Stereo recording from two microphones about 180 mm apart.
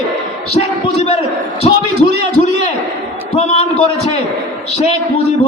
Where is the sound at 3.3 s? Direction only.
35° left (ahead or behind).